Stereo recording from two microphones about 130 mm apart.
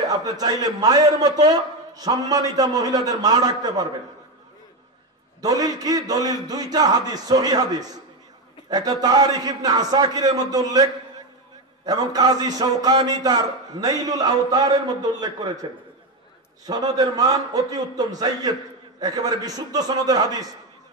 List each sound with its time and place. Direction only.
0.1 s a man's voice: 30° right (ahead or behind)
5.4 s a man's voice: 30° right (ahead or behind)